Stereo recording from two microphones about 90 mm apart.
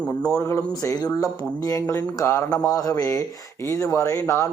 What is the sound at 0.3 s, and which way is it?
Speech, 30° left (ahead or behind).